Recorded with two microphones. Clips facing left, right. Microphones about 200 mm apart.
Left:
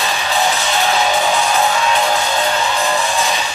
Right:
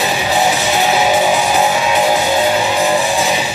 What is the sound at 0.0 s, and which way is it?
Music, 15° right (ahead or behind).